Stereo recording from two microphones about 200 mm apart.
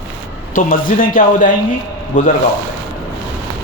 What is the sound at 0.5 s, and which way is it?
Speech, 45° left (ahead or behind).